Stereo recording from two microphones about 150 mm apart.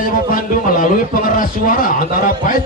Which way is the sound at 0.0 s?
65° left (ahead or behind).